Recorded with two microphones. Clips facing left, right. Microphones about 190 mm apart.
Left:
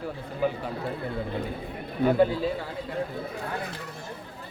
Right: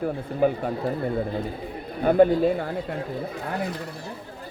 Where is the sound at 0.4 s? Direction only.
50° right (ahead or behind).